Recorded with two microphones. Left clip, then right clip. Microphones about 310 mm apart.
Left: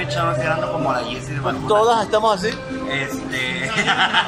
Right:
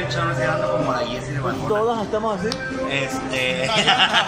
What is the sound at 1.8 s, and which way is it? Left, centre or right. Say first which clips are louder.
Speech: left 8 dB; left.